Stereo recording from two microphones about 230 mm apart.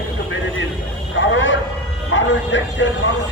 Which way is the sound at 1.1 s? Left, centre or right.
Left.